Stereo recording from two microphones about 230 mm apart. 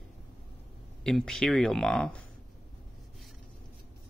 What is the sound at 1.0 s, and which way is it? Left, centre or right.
Speech, centre.